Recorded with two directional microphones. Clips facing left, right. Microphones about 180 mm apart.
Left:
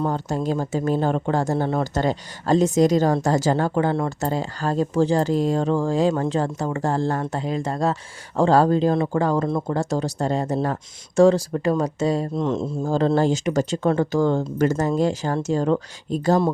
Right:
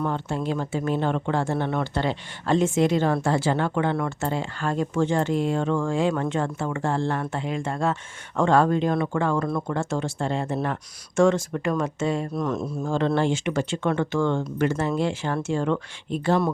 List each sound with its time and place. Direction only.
0.1 s speech: 40° left (ahead or behind)
9.4 s speech: 25° left (ahead or behind)
9.7 s speech: 35° left (ahead or behind)
12.3 s speech: 25° left (ahead or behind)
12.9 s speech: 40° left (ahead or behind)